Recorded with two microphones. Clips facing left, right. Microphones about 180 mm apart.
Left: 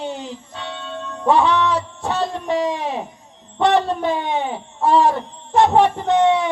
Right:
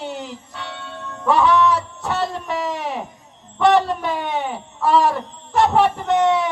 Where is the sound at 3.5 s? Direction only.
25° left (ahead or behind).